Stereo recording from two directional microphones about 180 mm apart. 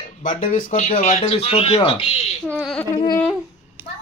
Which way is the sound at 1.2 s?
30° left (ahead or behind).